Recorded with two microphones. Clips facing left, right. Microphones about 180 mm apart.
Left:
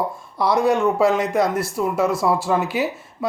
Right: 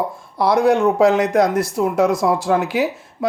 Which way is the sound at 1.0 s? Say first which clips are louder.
Right 4 dB; 75° right (ahead or behind).